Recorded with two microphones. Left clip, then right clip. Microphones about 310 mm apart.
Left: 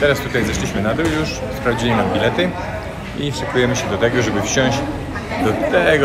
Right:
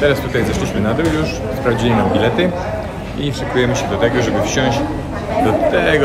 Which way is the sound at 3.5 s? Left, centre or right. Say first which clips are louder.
Right 1 dB; centre.